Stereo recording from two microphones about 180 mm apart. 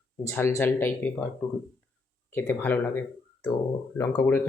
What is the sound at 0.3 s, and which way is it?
Speech, 15° left (ahead or behind).